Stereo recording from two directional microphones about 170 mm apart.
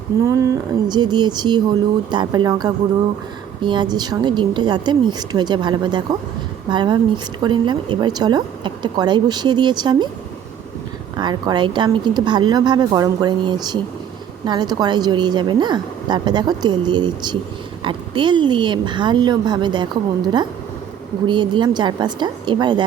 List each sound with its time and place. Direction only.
0.2 s a woman's voice: 20° right (ahead or behind)
11.2 s a woman's voice: 25° right (ahead or behind)